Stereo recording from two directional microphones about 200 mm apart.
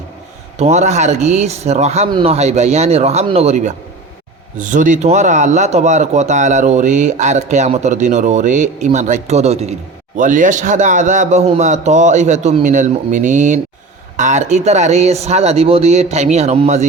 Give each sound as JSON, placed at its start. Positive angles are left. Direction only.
{"t": 0.6, "sound": "speech", "side_deg": -35}